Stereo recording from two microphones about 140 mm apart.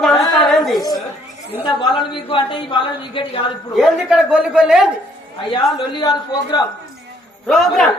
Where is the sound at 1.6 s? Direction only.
35° left (ahead or behind).